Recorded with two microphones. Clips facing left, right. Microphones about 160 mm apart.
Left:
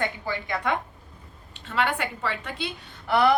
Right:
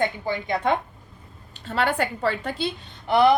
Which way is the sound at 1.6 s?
40° right (ahead or behind).